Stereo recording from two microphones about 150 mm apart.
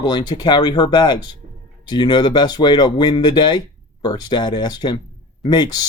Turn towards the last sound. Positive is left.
turn(degrees=30)  # may be behind; listen again after turning